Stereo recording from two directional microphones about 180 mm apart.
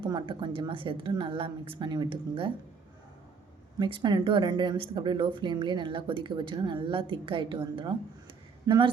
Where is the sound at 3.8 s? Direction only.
25° right (ahead or behind).